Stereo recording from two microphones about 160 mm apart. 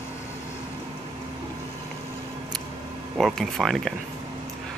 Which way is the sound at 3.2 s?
Centre (ahead or behind).